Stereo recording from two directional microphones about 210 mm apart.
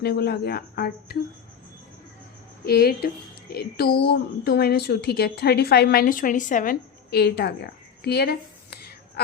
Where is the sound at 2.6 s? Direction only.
45° left (ahead or behind).